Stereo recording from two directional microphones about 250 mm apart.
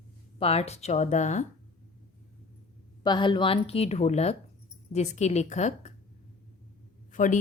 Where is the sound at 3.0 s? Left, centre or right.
Centre.